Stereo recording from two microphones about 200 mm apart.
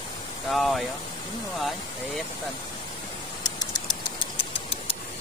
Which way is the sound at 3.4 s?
20° left (ahead or behind).